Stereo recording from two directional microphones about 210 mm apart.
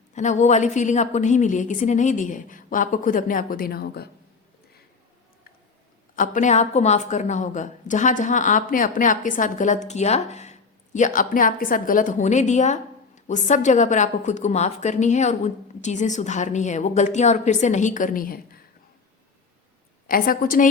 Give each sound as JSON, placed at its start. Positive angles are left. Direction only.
{"t": 0.1, "sound": "a woman's voice", "side_deg": 35}
{"t": 6.1, "sound": "a woman's voice", "side_deg": 40}
{"t": 20.1, "sound": "a woman's voice", "side_deg": 45}